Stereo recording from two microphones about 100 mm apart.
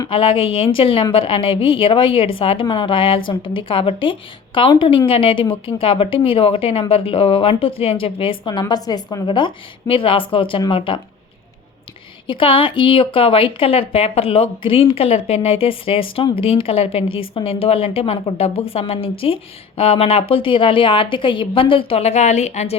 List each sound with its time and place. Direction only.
0.1 s a woman's voice: 65° left (ahead or behind)
8.6 s a woman's voice: 40° left (ahead or behind); by 11.0 s 60° left (ahead or behind)
12.3 s a woman's voice: 60° left (ahead or behind); by 22.1 s 80° left